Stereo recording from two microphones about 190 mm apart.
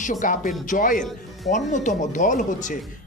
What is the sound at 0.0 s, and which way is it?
A man's voice, 40° left (ahead or behind).